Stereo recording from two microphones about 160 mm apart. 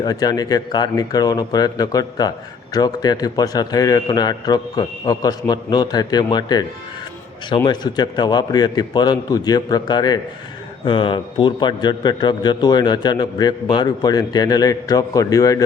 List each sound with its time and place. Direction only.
0.0 s a man's voice: 25° left (ahead or behind)